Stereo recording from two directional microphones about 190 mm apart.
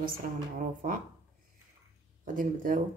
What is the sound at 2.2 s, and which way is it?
Speech, 45° right (ahead or behind).